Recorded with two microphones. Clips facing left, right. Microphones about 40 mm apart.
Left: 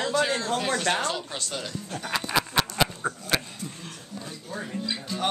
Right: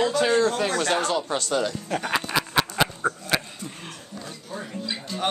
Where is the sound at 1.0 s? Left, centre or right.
Right.